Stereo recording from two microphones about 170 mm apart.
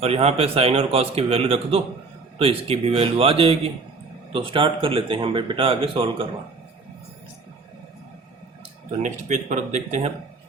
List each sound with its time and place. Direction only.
0.0 s speech: 35° right (ahead or behind)
9.0 s speech: 45° right (ahead or behind)